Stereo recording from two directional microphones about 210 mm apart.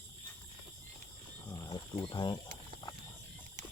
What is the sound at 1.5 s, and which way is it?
Mechanisms, 20° left (ahead or behind).